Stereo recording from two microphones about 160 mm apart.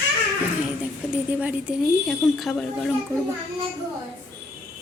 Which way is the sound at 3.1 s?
15° right (ahead or behind).